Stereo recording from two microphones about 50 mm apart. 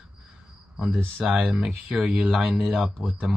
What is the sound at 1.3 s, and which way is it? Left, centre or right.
Speech, right.